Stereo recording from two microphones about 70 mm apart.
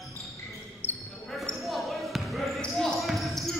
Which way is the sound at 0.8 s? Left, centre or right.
Left.